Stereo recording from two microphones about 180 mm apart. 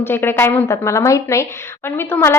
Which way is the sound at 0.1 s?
10° left (ahead or behind).